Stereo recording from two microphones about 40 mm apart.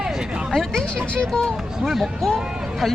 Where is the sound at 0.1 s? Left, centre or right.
Centre.